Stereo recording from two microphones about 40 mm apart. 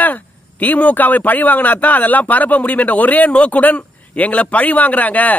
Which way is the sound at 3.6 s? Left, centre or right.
Left.